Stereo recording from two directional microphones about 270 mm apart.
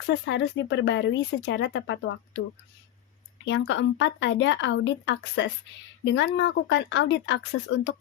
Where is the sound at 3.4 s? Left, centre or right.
Left.